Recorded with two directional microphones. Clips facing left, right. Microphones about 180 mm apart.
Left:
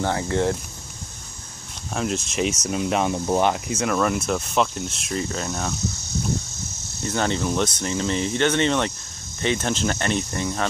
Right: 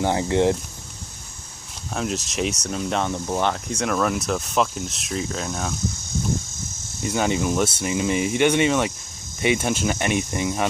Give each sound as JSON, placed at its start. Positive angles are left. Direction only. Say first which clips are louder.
{"t": 0.0, "sound": "speech", "louder": "right 3 dB", "side_deg": -20}
{"t": 2.0, "sound": "speech", "louder": "left 1 dB", "side_deg": 0}
{"t": 7.0, "sound": "speech", "louder": "right 1 dB", "side_deg": -10}